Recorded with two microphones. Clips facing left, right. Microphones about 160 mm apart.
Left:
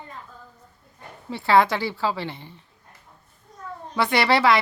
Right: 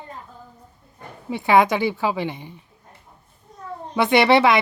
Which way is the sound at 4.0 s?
20° right (ahead or behind).